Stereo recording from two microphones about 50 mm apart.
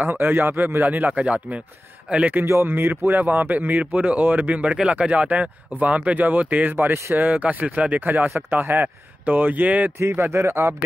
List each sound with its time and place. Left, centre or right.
0.0 s speech: right
0.8 s a man's voice: right
2.6 s speech: right
3.2 s speech: right
6.8 s speech: right
7.2 s speech: right
10.1 s speech: right